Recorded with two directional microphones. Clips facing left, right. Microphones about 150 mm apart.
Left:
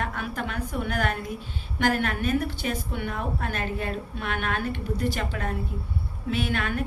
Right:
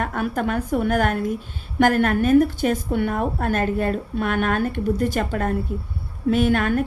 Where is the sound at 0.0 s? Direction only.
50° right (ahead or behind).